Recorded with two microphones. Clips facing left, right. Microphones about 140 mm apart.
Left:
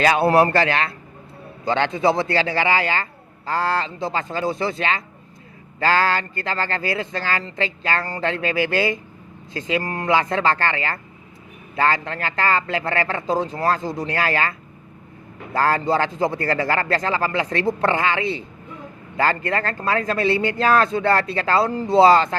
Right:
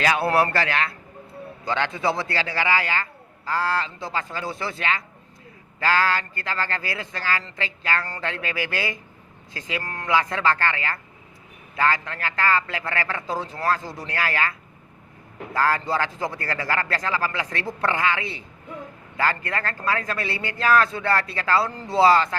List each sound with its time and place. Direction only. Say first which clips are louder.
0.0 s a man's voice: left 5 dB; 30° left (ahead or behind)
9.8 s speech: left 7 dB; 15° left (ahead or behind)
10.1 s a man's voice: left 2 dB; 25° left (ahead or behind)
15.5 s a man's voice: left 4 dB; 25° left (ahead or behind)
21.7 s speech: left 11 dB; 10° left (ahead or behind)
21.9 s a man's voice: left 4 dB; 25° left (ahead or behind)